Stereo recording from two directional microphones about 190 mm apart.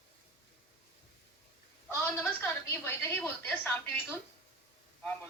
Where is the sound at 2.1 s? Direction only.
10° left (ahead or behind).